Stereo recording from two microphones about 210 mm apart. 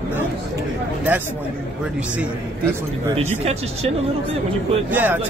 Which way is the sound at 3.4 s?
30° right (ahead or behind).